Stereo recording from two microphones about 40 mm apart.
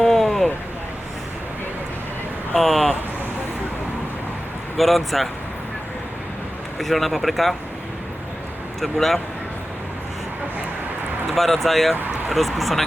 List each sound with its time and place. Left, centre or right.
0.0 s a sound: centre
2.6 s speech: centre
4.8 s speech: centre
6.7 s speech: centre
8.8 s speech: centre
11.3 s speech: centre